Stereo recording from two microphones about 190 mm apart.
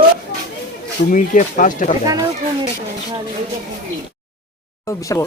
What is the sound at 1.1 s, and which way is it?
Speech, 45° left (ahead or behind).